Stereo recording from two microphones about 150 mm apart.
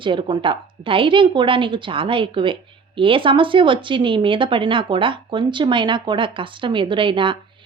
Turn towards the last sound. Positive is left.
turn(degrees=-35)  # may be behind; listen again after turning